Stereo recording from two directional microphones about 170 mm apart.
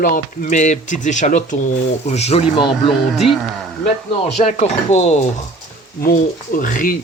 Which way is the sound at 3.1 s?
Centre (ahead or behind).